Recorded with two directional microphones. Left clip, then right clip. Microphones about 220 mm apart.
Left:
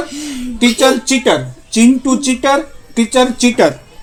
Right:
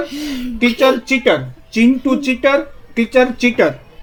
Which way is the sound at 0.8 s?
20° left (ahead or behind).